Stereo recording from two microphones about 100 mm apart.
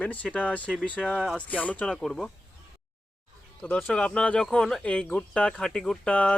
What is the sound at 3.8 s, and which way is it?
Speech, 10° left (ahead or behind).